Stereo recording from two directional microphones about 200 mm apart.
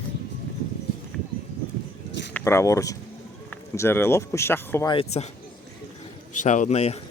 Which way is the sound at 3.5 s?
10° left (ahead or behind).